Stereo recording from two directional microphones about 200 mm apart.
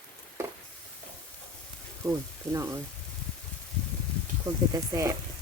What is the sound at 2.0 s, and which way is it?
Speech, 15° right (ahead or behind).